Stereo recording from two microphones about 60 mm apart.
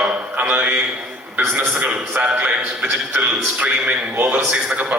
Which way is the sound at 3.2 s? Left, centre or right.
Right.